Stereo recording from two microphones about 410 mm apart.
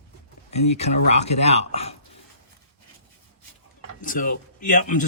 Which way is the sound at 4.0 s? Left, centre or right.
Centre.